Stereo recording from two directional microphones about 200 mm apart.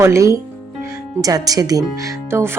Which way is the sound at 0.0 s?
15° right (ahead or behind).